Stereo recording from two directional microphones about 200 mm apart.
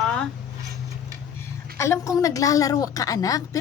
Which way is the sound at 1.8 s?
15° left (ahead or behind).